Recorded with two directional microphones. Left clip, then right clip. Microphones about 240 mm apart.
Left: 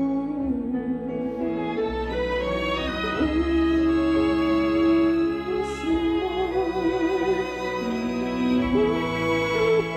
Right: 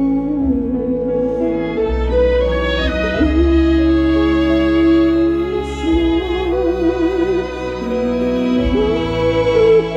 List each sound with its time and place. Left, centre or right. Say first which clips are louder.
9.5 s music: right 12 dB; left